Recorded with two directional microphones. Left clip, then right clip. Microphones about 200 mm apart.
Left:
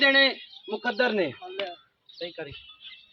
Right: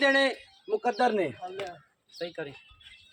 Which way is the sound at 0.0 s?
25° left (ahead or behind).